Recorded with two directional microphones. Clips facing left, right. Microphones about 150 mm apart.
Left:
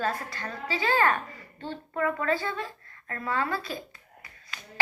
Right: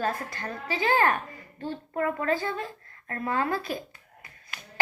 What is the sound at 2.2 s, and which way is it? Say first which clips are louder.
A woman's voice: right 1 dB; 45° right (ahead or behind).